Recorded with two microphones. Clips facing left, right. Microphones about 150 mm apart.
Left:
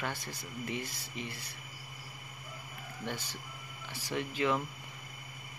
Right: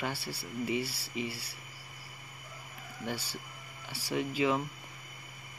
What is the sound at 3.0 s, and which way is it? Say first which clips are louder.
Speech: right 2 dB; 10° right (ahead or behind).